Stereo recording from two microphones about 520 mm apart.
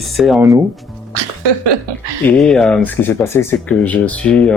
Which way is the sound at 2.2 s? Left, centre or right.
Centre.